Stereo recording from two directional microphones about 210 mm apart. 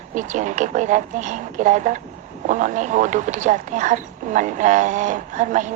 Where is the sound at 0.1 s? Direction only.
35° right (ahead or behind).